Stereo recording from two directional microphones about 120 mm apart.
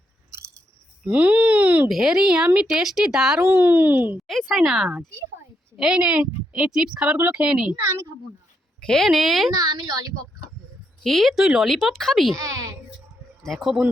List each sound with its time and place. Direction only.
1.0 s speech: 10° right (ahead or behind)
1.9 s speech: 5° right (ahead or behind)
4.3 s speech: centre (ahead or behind)
8.8 s speech: 5° left (ahead or behind)
11.0 s speech: centre (ahead or behind)
12.3 s speech: 30° right (ahead or behind)
13.4 s speech: centre (ahead or behind)